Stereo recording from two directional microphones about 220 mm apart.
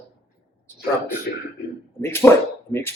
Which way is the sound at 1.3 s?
45° left (ahead or behind).